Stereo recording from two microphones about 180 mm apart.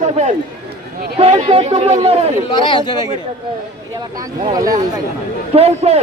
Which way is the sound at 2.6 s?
25° left (ahead or behind).